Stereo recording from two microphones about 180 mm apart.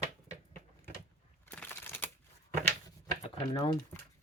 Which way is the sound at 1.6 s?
10° left (ahead or behind).